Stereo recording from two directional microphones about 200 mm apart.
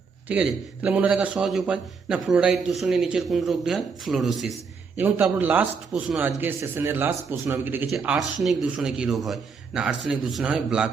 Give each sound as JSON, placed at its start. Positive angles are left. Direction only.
{"t": 0.3, "sound": "a man's voice", "side_deg": -5}